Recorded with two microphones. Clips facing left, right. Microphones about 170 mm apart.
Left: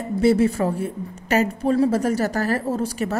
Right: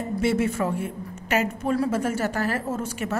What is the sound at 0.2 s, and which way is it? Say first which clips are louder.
A woman's voice: left 6 dB; 35° left (ahead or behind).